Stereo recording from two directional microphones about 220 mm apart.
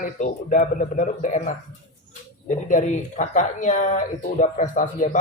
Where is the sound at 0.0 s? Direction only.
35° left (ahead or behind).